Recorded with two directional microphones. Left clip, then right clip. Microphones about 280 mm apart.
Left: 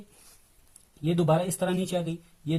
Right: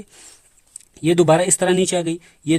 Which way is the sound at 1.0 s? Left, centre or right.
Right.